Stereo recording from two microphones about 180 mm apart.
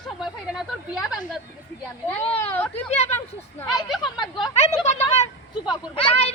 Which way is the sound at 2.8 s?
35° left (ahead or behind).